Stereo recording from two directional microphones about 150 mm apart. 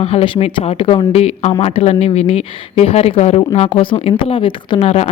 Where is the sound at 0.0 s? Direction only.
40° left (ahead or behind).